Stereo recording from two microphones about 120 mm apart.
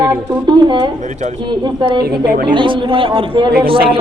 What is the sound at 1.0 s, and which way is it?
Speech, 85° right.